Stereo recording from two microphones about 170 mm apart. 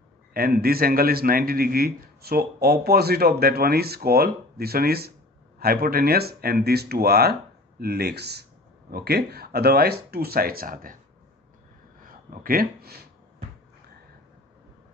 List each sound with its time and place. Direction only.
0.3 s a man's voice: 60° right (ahead or behind)
12.0 s speech: 55° right (ahead or behind)